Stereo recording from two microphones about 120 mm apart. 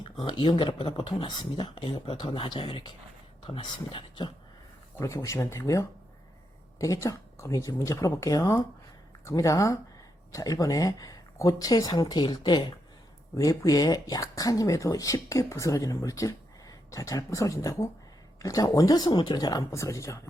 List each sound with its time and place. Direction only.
0.0 s speech: 45° left (ahead or behind)
4.9 s speech: 25° left (ahead or behind)
13.3 s speech: 30° left (ahead or behind)